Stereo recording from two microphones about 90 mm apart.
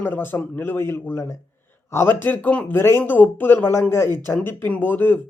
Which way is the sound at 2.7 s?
30° left (ahead or behind).